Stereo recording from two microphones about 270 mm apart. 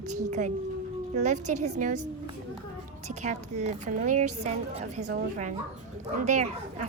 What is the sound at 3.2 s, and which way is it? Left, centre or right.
Speech, right.